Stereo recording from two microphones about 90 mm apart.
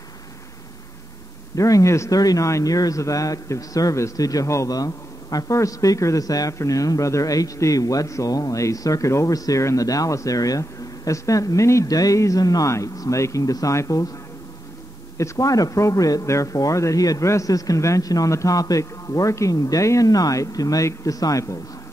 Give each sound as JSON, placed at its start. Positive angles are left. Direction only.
{"t": 1.5, "sound": "a man's voice", "side_deg": 40}
{"t": 15.1, "sound": "a man's voice", "side_deg": 35}